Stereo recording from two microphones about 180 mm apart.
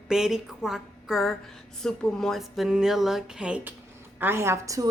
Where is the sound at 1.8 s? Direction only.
5° left (ahead or behind).